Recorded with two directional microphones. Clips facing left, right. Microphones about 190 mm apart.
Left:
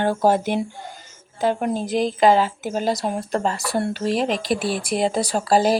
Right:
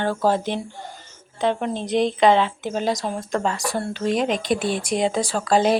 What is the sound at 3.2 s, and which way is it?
Speech, 35° left (ahead or behind).